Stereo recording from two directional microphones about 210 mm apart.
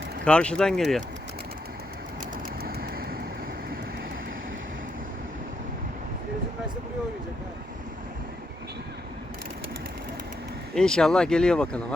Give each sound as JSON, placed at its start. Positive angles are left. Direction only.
{"t": 0.3, "sound": "speech", "side_deg": 5}
{"t": 2.6, "sound": "vehicle", "side_deg": -45}
{"t": 10.8, "sound": "speech", "side_deg": 5}